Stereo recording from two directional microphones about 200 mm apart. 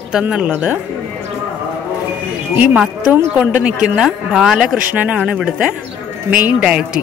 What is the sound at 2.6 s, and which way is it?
A woman's voice, 5° right (ahead or behind).